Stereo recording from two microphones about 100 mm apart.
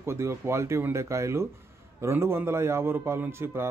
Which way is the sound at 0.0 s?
25° right (ahead or behind).